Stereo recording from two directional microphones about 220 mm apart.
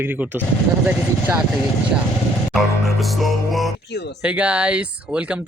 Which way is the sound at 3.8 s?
50° left (ahead or behind).